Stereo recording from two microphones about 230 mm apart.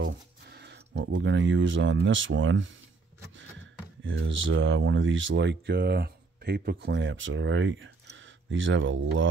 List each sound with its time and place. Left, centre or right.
0.0 s speech: right
4.0 s speech: right